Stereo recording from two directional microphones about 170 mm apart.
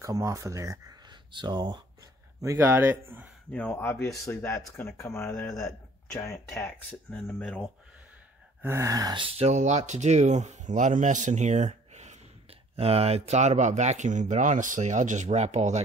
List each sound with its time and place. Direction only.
0.0 s speech: 20° right (ahead or behind)
2.4 s speech: 15° right (ahead or behind)
3.5 s speech: 10° left (ahead or behind)
8.6 s speech: 15° right (ahead or behind); by 15.8 s 40° right (ahead or behind)